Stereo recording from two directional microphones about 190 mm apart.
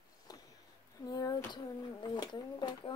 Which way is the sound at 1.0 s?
20° left (ahead or behind).